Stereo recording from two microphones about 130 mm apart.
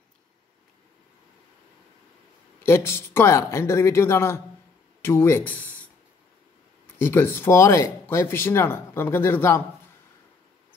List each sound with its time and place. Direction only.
2.6 s speech: 20° left (ahead or behind)
7.0 s speech: 20° left (ahead or behind)